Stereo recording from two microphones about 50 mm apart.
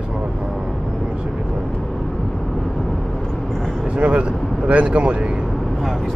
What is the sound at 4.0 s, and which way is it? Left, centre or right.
Speech, right.